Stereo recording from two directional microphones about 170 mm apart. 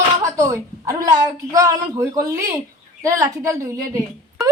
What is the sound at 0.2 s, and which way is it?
Speech, 20° right (ahead or behind).